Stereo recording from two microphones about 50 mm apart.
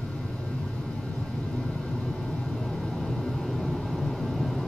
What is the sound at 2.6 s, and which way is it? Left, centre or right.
Vehicle, centre.